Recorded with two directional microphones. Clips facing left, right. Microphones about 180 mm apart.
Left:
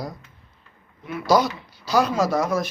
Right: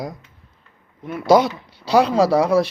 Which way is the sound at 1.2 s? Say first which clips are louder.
Right 5 dB; 25° right (ahead or behind).